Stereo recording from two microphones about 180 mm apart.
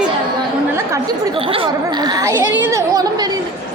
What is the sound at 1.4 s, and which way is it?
Speech, 30° right (ahead or behind).